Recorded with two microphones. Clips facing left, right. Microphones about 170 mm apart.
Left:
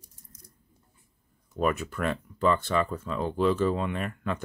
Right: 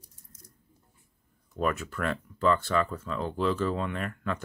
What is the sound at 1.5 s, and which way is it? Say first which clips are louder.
Speech: left 2 dB; 15° left (ahead or behind).